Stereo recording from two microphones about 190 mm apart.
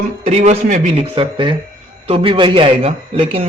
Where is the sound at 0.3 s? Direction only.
35° right (ahead or behind).